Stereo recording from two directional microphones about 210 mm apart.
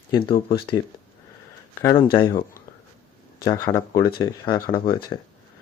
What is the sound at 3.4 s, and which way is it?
Speech, 20° left (ahead or behind).